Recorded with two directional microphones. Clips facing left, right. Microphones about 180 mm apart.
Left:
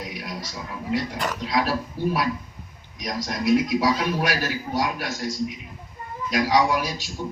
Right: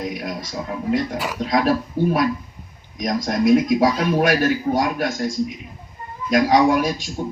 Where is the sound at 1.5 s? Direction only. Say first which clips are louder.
Right 7 dB; 50° right (ahead or behind).